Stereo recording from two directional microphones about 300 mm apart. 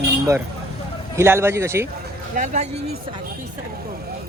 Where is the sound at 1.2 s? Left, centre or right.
Centre.